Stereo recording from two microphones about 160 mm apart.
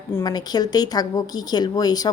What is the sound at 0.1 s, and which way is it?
A woman's voice, 20° left (ahead or behind).